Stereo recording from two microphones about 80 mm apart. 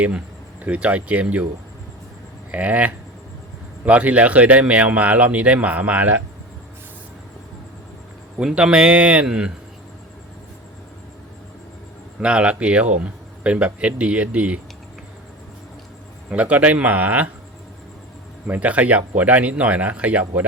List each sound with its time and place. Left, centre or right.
0.6 s speech: centre
2.5 s speech: centre
8.4 s speech: centre
12.2 s speech: centre
16.3 s speech: centre
18.4 s speech: centre